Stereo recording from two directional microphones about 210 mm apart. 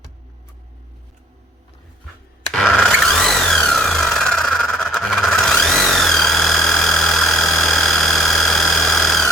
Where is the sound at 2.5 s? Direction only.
5° left (ahead or behind).